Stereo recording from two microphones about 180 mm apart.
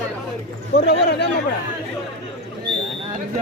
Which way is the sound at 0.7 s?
65° left (ahead or behind).